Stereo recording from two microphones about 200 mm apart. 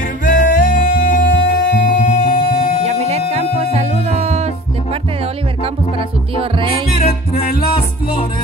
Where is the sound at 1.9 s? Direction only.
35° left (ahead or behind).